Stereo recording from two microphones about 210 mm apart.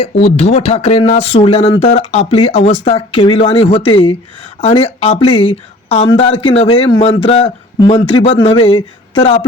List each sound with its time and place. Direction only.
0.0 s speech: 30° left (ahead or behind)